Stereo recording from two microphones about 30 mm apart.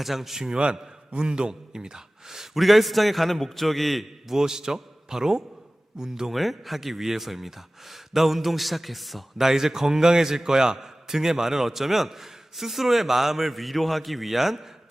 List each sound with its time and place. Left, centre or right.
0.0 s a man's voice: centre
0.5 s speech: right; by 2.6 s centre
2.6 s speech: centre
4.3 s a man's voice: centre
6.3 s speech: centre
9.5 s a man's voice: centre